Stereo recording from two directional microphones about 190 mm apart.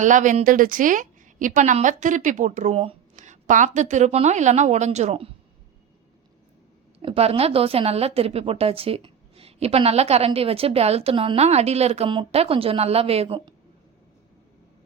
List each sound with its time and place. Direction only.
0.0 s a woman's voice: 40° right (ahead or behind)
7.0 s a woman's voice: 30° right (ahead or behind)